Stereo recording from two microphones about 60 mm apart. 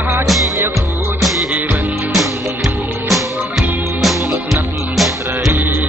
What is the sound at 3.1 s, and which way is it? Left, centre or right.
Music, centre.